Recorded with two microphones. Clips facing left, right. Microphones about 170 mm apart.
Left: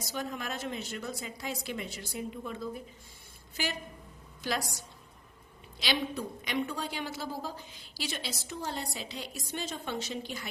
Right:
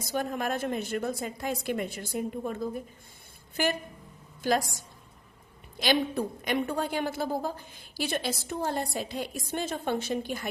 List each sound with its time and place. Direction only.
0.0 s a woman's voice: 50° right (ahead or behind)